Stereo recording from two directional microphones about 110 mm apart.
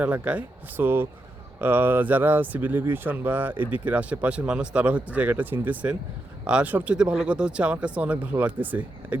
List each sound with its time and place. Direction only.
0.0 s speech: 15° right (ahead or behind)